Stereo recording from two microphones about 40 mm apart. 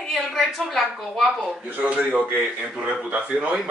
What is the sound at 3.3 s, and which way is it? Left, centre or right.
Speech, centre.